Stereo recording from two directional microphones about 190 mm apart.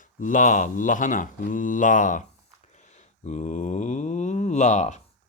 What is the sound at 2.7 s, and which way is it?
Mantra, 40° left (ahead or behind).